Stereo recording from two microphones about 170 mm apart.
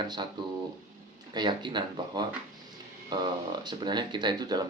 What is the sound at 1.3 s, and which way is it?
Speech, 25° right (ahead or behind).